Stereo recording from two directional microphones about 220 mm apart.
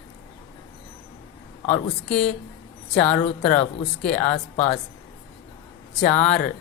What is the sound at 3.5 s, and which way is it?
Speech, 35° left (ahead or behind).